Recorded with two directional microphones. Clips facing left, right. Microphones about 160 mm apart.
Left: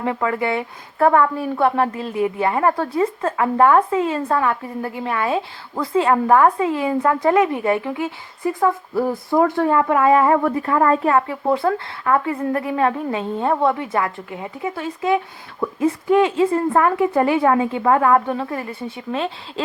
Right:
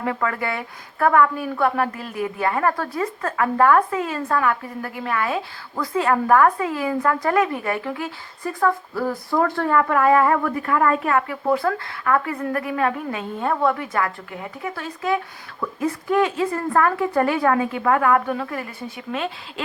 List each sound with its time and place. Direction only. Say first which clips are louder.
0.0 s a woman's voice: left 3 dB; 20° left (ahead or behind)